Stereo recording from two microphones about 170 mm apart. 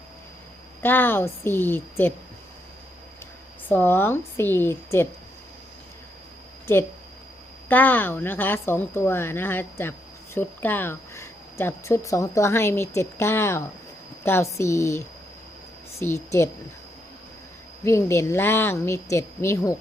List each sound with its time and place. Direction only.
0.8 s speech: 10° left (ahead or behind)
3.7 s speech: 10° left (ahead or behind)
7.7 s speech: 10° left (ahead or behind)
17.8 s speech: 15° left (ahead or behind)